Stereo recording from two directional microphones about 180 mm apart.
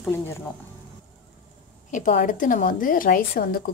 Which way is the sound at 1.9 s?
45° left (ahead or behind).